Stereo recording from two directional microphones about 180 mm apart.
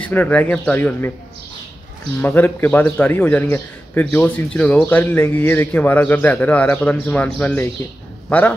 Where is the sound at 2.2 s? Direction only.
10° left (ahead or behind).